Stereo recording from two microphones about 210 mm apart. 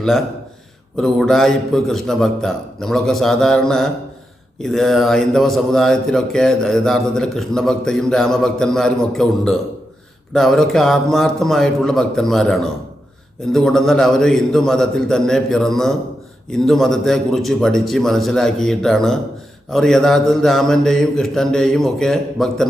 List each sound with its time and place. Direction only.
0.9 s speech: centre (ahead or behind)